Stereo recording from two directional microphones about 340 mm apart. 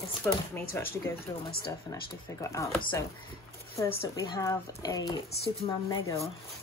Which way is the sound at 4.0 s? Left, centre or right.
Centre.